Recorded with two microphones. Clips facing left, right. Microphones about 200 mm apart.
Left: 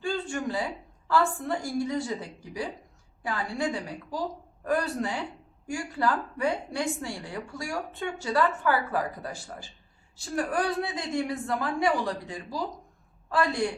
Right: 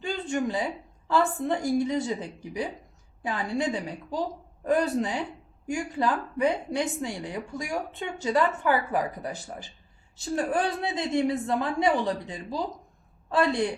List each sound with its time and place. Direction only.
0.0 s a woman's voice: 20° right (ahead or behind)